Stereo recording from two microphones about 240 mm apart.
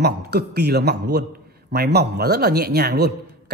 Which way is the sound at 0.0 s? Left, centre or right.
Right.